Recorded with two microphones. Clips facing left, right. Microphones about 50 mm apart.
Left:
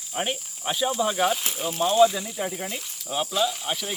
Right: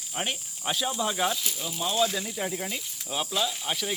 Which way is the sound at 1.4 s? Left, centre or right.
Left.